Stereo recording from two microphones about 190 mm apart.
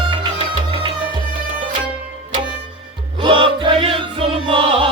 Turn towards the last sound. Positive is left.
turn(degrees=-30)  # may be behind; listen again after turning